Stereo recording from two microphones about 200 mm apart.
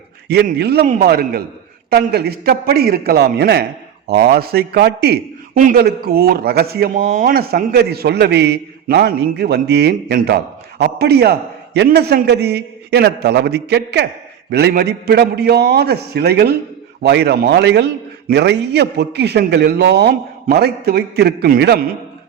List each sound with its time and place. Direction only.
0.3 s a man's voice: 55° right (ahead or behind)